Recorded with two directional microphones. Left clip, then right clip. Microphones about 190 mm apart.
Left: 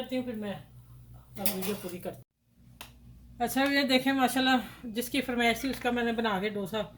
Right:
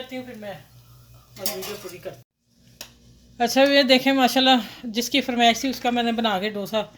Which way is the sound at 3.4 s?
45° right (ahead or behind).